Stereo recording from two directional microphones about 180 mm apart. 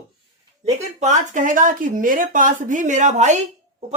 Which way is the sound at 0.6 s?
40° right (ahead or behind).